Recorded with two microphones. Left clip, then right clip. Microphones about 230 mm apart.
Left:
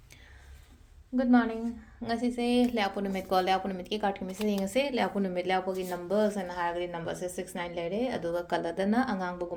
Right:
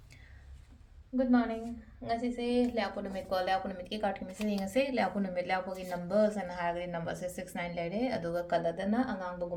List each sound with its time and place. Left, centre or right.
1.1 s a woman's voice: left